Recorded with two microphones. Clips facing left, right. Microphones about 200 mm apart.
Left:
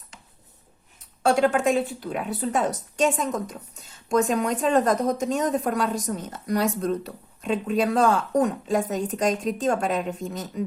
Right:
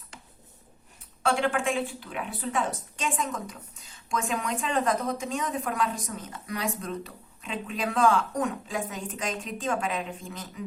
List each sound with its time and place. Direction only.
1.2 s a woman's voice: 40° left (ahead or behind)